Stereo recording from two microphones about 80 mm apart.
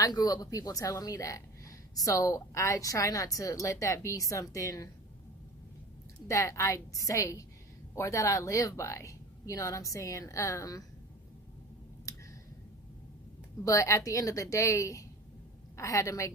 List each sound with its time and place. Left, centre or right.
0.0 s a woman's voice: left
6.2 s speech: left
12.1 s a sound: left
13.7 s speech: left